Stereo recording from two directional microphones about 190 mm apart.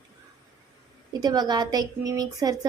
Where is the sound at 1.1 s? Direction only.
20° right (ahead or behind).